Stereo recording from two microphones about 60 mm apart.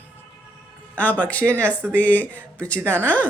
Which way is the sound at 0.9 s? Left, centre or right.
Left.